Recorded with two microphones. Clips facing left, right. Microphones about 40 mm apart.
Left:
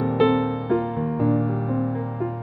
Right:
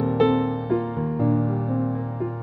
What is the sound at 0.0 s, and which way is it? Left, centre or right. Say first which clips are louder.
Music: even; left.